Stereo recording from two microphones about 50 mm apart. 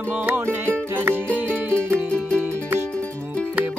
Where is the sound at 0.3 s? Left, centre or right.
Right.